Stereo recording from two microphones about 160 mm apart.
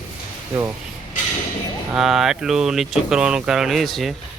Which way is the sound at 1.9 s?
Centre (ahead or behind).